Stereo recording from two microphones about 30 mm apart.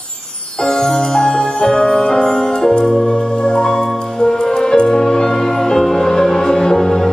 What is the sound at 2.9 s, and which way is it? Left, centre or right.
Organ, left.